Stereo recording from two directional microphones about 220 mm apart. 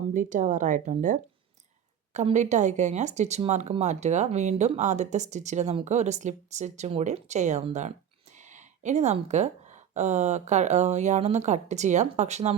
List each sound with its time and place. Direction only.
0.1 s speech: 35° right (ahead or behind)